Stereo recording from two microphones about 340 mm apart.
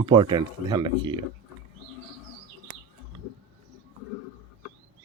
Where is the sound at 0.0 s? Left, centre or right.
Centre.